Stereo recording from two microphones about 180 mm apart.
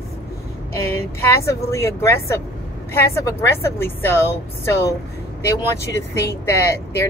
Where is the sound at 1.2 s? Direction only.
15° left (ahead or behind).